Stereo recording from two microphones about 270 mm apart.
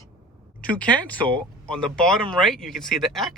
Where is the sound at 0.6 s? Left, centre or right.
Centre.